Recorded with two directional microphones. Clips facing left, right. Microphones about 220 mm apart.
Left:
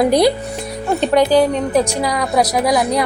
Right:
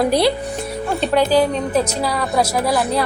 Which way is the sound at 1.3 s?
15° left (ahead or behind).